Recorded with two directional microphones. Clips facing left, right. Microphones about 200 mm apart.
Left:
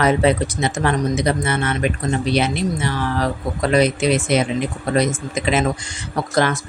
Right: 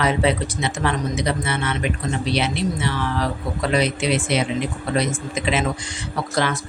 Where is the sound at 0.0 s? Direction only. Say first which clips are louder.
Left 4 dB; 45° left (ahead or behind).